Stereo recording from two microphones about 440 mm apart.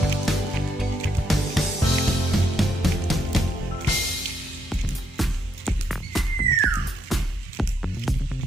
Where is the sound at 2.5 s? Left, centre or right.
Centre.